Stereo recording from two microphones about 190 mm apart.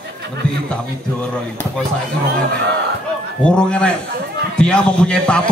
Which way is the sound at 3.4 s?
5° left (ahead or behind).